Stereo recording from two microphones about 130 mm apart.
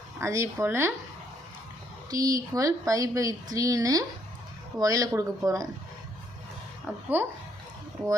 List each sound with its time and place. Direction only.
0.2 s speech: 20° right (ahead or behind)
2.0 s speech: 25° right (ahead or behind)
6.9 s speech: 15° right (ahead or behind)